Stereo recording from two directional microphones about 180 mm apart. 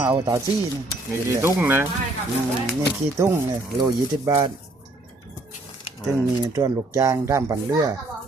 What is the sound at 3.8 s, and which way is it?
Speech, 20° right (ahead or behind).